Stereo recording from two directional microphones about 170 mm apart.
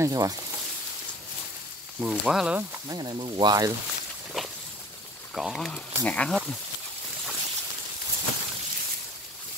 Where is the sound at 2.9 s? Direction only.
25° right (ahead or behind).